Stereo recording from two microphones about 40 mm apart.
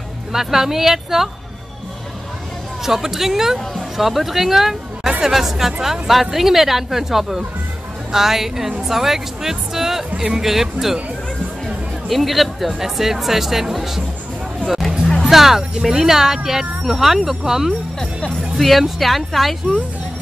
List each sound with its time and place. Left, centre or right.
0.3 s speech: centre
2.8 s a woman's voice: centre
11.6 s chatter: centre
12.7 s speech: centre
15.2 s music: centre
15.8 s speech: centre
18.6 s a woman's voice: centre